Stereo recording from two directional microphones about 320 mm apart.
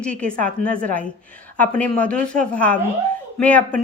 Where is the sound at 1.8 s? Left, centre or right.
Centre.